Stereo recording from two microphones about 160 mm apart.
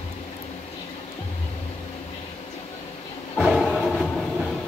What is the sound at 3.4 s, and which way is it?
Train, centre (ahead or behind).